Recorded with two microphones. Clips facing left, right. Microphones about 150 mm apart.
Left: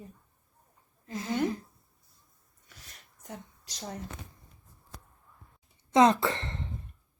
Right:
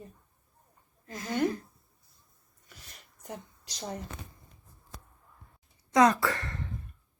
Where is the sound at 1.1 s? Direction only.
25° left (ahead or behind).